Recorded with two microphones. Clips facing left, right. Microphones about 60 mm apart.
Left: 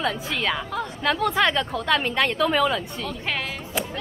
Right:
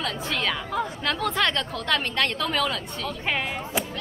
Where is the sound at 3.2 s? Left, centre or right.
Centre.